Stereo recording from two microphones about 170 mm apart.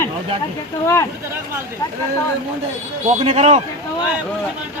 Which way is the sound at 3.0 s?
40° right (ahead or behind).